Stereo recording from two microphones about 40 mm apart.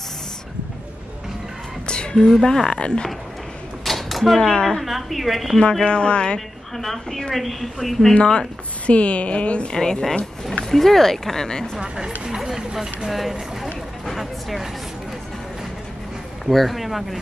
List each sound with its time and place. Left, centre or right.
2.4 s speech: centre
2.8 s a woman's voice: left
3.8 s a sound: centre
4.4 s speech: centre
4.8 s a woman's voice: centre
5.6 s a woman's voice: centre
6.8 s a woman's voice: centre
8.1 s a woman's voice: left
9.7 s speech: centre
10.7 s speech: centre
12.4 s a woman's voice: centre
16.4 s a woman's voice: centre